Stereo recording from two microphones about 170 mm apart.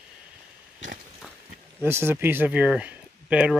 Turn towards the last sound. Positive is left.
turn(degrees=-5)  # may be behind; listen again after turning